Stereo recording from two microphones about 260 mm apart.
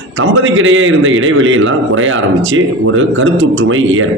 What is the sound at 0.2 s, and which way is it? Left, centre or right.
A man's voice, right.